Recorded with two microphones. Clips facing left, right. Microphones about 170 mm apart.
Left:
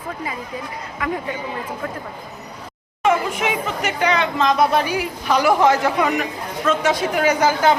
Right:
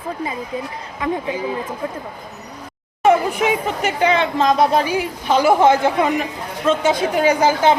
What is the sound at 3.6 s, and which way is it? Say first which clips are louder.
A woman's voice: right 3 dB; 30° right (ahead or behind).